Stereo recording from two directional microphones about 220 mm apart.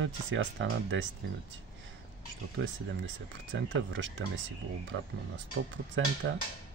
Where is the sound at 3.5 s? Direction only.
55° right (ahead or behind).